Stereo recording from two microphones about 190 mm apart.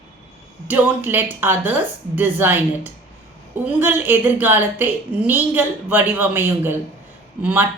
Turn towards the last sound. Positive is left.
turn(degrees=-5)  # may be behind; listen again after turning